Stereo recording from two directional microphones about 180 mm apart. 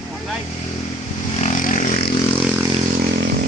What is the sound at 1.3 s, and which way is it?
Vehicle, 40° left (ahead or behind).